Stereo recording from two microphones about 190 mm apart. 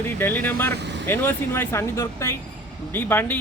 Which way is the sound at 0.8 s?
65° right (ahead or behind).